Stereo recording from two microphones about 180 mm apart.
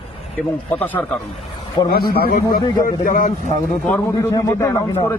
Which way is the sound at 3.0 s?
50° left (ahead or behind).